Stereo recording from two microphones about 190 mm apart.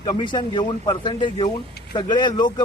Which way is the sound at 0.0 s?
20° left (ahead or behind).